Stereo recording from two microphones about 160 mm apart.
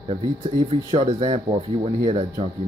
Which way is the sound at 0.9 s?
40° right (ahead or behind).